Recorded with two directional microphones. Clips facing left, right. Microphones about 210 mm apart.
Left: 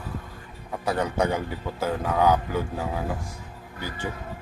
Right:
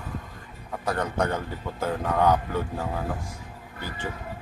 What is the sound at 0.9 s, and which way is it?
A man's voice, 10° left (ahead or behind).